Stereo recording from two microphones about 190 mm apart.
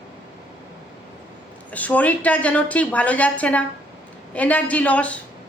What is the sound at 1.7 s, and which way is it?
A woman's voice, 10° left (ahead or behind).